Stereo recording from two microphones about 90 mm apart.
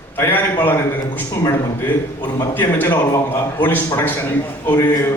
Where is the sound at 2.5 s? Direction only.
20° left (ahead or behind).